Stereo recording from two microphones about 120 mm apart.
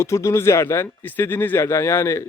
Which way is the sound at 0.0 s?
25° left (ahead or behind).